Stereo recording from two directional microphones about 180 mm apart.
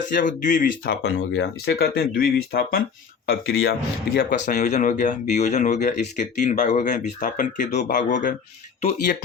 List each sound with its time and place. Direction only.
0.1 s speech: 45° left (ahead or behind)
0.9 s speech: 70° left (ahead or behind); by 9.1 s 35° left (ahead or behind)